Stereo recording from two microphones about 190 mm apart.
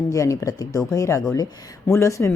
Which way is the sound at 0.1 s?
15° left (ahead or behind).